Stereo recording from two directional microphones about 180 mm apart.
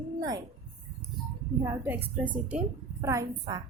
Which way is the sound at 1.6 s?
15° right (ahead or behind).